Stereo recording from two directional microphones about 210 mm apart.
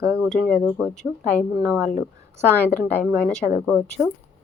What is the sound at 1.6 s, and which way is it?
Speech, 10° right (ahead or behind).